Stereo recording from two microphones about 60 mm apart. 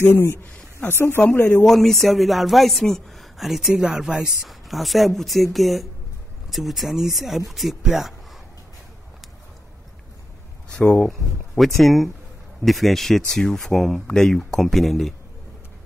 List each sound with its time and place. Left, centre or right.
0.0 s speech: left
1.6 s speech: centre
10.7 s a sound: centre
11.0 s speech: centre